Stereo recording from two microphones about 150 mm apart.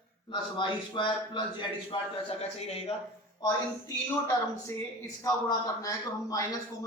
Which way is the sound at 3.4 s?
20° left (ahead or behind).